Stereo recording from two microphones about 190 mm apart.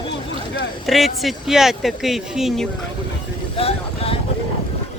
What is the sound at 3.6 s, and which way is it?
Vehicle, 30° left (ahead or behind).